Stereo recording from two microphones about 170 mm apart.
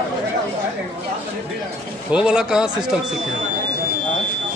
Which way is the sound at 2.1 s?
5° right (ahead or behind).